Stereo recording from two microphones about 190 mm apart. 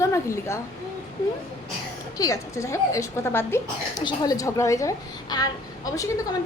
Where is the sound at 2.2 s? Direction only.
15° left (ahead or behind).